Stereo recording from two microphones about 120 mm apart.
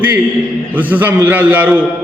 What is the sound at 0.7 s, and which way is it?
A man's voice, 15° right (ahead or behind).